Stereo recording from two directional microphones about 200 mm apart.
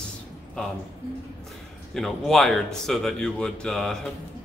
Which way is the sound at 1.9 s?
Centre (ahead or behind).